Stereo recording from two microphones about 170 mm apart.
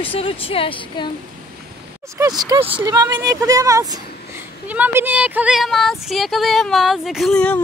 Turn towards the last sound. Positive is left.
turn(degrees=5)  # may be behind; listen again after turning